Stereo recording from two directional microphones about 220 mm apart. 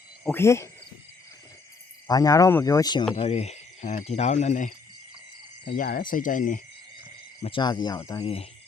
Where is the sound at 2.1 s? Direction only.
15° left (ahead or behind).